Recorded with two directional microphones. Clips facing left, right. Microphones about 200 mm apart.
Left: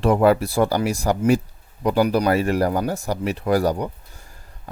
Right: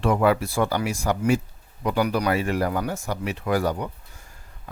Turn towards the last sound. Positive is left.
turn(degrees=35)  # may be behind; listen again after turning